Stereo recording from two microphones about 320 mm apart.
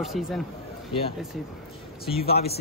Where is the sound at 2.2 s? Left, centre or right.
Centre.